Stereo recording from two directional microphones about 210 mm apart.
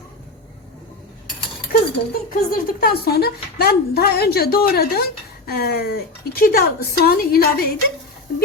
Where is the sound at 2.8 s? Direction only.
45° left (ahead or behind).